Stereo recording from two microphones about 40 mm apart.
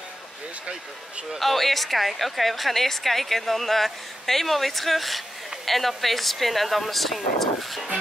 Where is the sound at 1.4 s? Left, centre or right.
Centre.